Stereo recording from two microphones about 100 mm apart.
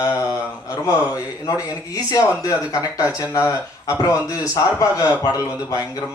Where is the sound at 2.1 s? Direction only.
35° left (ahead or behind).